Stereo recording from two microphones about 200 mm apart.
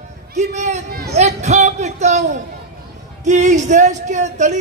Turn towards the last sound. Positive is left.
turn(degrees=-35)  # may be behind; listen again after turning